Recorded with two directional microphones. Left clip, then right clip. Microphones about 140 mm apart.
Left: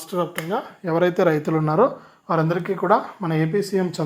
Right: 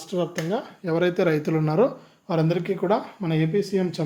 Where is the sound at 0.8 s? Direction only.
Centre (ahead or behind).